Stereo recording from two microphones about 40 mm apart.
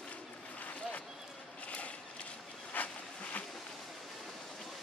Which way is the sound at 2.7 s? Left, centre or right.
Left.